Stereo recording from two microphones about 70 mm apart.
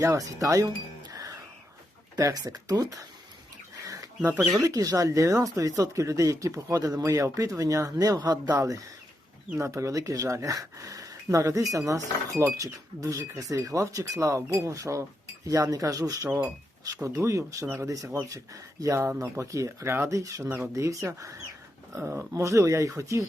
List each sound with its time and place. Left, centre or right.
0.0 s speech: right
1.1 s a sound: right
2.1 s speech: right
3.8 s a sound: right
4.6 s speech: right
8.5 s speech: right
22.0 s speech: right
22.3 s speech: right